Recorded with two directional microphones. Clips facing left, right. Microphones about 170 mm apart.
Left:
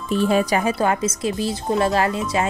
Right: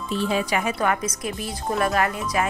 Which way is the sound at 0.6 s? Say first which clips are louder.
Left 4 dB; 30° left (ahead or behind).